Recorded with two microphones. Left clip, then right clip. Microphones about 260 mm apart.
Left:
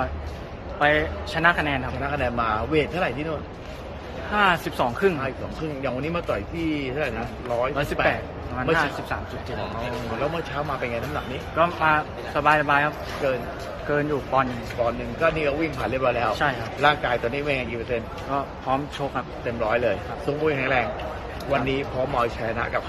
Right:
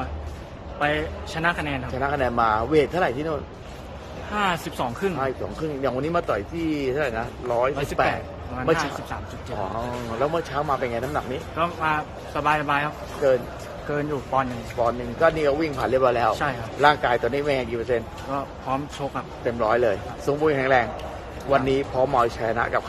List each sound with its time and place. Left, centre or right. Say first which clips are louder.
0.7 s speech: left 4 dB; centre
2.0 s speech: right 3 dB; right
10.3 s speech: right 3 dB; right
11.5 s speech: left 4 dB; centre